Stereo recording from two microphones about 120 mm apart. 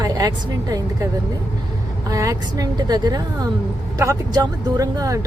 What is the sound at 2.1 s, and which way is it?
A woman's voice, 30° right (ahead or behind).